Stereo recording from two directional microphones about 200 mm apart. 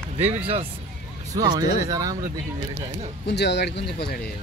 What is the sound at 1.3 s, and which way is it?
Speech, 15° right (ahead or behind).